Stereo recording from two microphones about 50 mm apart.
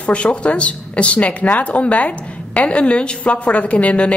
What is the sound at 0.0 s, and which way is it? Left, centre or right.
Speech, left.